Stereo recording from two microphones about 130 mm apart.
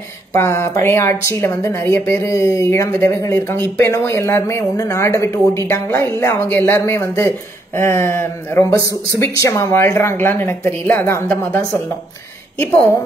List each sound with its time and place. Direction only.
0.3 s speech: 20° left (ahead or behind)